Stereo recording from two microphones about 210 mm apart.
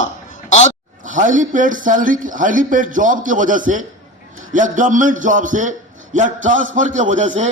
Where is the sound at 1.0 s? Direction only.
35° right (ahead or behind).